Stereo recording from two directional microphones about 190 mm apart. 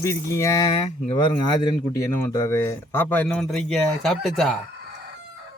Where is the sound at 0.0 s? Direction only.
15° left (ahead or behind).